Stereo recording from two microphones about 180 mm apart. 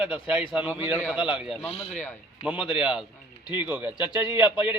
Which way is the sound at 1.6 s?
35° left (ahead or behind).